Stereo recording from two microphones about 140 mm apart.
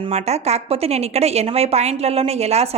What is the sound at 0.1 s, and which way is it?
A woman's voice, 50° right (ahead or behind).